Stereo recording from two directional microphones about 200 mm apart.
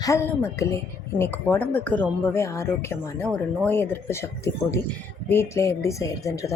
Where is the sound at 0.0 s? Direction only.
15° left (ahead or behind).